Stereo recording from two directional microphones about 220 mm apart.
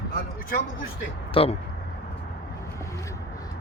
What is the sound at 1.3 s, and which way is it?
Speech, 25° left (ahead or behind).